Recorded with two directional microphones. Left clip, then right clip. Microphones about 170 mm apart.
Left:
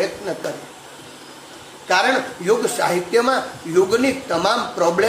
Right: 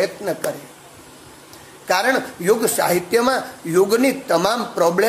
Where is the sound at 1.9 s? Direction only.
65° right (ahead or behind).